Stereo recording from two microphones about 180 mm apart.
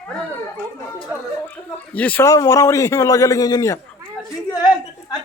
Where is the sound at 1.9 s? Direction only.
10° left (ahead or behind).